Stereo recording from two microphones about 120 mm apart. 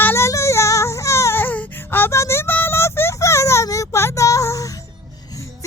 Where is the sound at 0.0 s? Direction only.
20° left (ahead or behind).